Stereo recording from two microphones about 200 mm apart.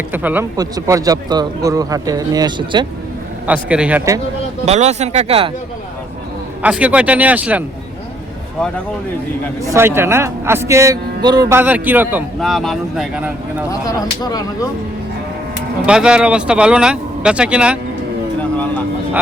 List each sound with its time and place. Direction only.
0.1 s a man's voice: 10° right (ahead or behind)
3.4 s a man's voice: 5° right (ahead or behind)
4.6 s speech: 35° right (ahead or behind)
6.6 s a man's voice: 5° right (ahead or behind)
9.6 s a man's voice: 15° right (ahead or behind)
12.4 s speech: centre (ahead or behind)
13.7 s speech: 20° left (ahead or behind)
15.9 s speech: 5° right (ahead or behind)